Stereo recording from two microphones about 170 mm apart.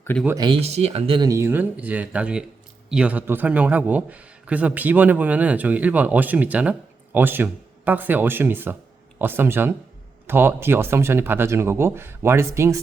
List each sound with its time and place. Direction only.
0.3 s speech: 30° right (ahead or behind)
1.3 s a man's voice: 15° right (ahead or behind)